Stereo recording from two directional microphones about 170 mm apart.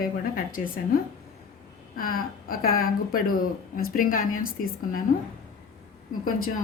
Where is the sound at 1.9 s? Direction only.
60° left (ahead or behind).